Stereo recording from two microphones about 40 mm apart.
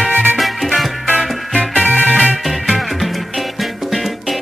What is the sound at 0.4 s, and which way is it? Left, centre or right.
Music, centre.